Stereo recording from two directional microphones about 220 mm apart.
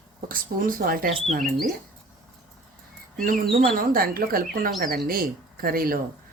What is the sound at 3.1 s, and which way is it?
Speech, 40° right (ahead or behind).